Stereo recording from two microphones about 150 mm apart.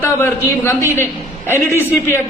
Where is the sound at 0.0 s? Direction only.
15° left (ahead or behind).